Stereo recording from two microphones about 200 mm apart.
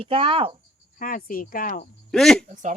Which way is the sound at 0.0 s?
25° right (ahead or behind).